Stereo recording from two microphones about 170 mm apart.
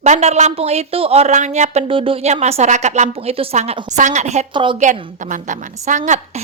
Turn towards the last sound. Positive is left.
turn(degrees=-40)  # may be behind; listen again after turning